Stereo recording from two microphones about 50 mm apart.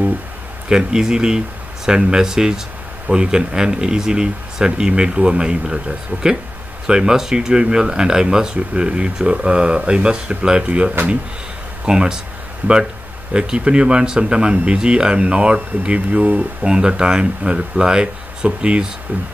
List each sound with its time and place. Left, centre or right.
0.7 s speech: centre
12.6 s speech: right
13.3 s speech: centre; by 16.4 s right
16.6 s speech: centre